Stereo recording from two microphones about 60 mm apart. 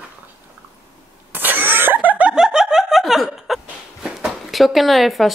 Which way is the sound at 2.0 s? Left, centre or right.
Right.